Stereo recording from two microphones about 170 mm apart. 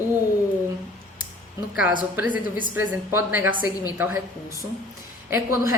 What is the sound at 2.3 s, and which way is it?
Speech, 55° left (ahead or behind).